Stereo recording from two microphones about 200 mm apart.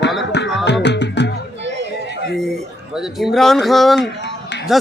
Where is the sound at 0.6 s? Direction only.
60° left (ahead or behind).